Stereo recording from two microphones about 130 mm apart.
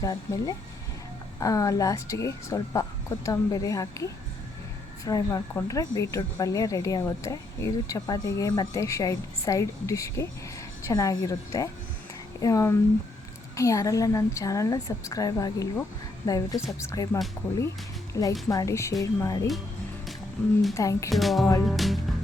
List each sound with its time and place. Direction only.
0.0 s speech: 30° left (ahead or behind)
20.7 s speech: 20° left (ahead or behind)
21.1 s music: centre (ahead or behind)